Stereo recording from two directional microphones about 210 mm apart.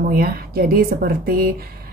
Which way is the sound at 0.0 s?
45° right (ahead or behind).